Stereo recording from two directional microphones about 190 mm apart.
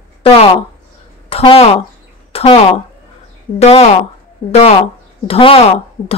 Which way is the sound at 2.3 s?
30° left (ahead or behind).